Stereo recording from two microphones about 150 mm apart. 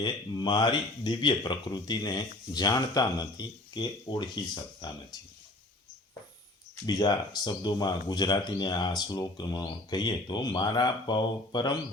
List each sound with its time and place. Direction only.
0.0 s speech: 30° left (ahead or behind)
6.8 s speech: 25° left (ahead or behind)